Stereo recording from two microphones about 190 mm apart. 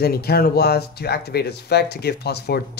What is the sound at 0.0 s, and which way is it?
Speech, 55° left (ahead or behind).